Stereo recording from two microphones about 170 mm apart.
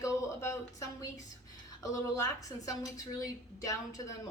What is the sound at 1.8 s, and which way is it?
Speech, 20° left (ahead or behind).